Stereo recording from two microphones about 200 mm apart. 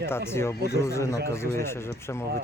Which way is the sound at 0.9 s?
15° left (ahead or behind).